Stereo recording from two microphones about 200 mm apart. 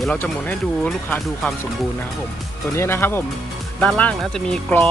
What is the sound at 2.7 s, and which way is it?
Speech, 10° left (ahead or behind).